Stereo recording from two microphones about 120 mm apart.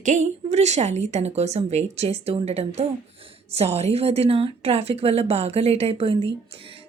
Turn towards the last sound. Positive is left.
turn(degrees=-55)  # may be behind; listen again after turning